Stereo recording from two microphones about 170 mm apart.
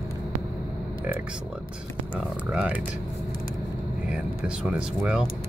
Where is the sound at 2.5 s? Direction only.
5° right (ahead or behind).